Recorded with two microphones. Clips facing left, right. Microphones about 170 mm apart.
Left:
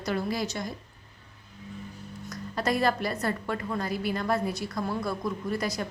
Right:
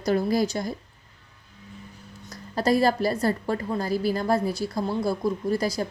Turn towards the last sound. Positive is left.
turn(degrees=-35)  # may be behind; listen again after turning